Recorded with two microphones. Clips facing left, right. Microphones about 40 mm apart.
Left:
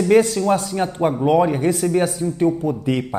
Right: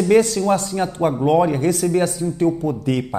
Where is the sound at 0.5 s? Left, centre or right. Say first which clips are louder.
Even; centre.